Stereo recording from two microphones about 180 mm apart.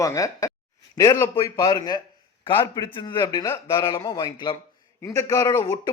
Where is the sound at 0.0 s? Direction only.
20° left (ahead or behind).